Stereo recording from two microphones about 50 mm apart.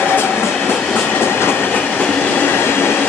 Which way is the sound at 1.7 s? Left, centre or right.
Left.